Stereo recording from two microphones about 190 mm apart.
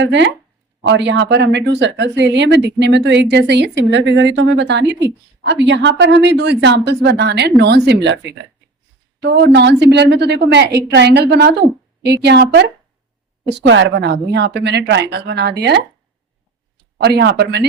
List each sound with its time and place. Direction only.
0.0 s a woman's voice: 70° right (ahead or behind)
17.0 s a woman's voice: 60° right (ahead or behind)